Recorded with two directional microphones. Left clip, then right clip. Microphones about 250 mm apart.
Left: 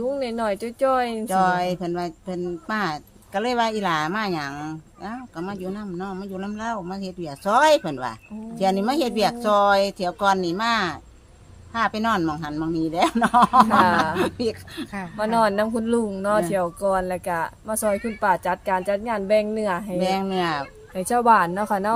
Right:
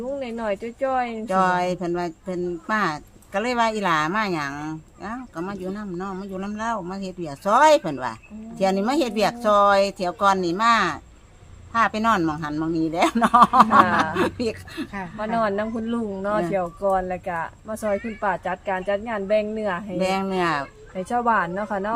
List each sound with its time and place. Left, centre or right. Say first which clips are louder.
0.2 s speech: left 2 dB; left
1.3 s speech: right 1 dB; centre
15.2 s speech: left 3 dB; left
20.0 s speech: right 1 dB; centre
20.9 s speech: left 4 dB; left